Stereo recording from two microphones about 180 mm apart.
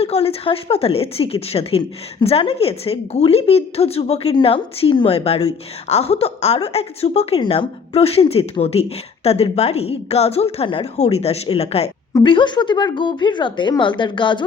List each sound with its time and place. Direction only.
0.0 s a woman's voice: 35° left (ahead or behind)